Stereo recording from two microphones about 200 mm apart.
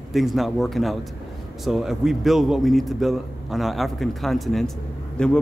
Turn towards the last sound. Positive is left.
turn(degrees=5)  # may be behind; listen again after turning